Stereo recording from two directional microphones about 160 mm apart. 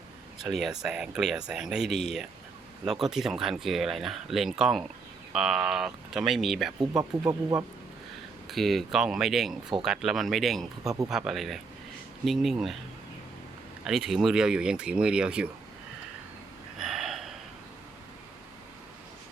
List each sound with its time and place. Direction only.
0.4 s speech: centre (ahead or behind)
6.9 s speech: 20° right (ahead or behind)
8.4 s speech: centre (ahead or behind)
13.8 s speech: 5° right (ahead or behind)
16.7 s a sound: centre (ahead or behind)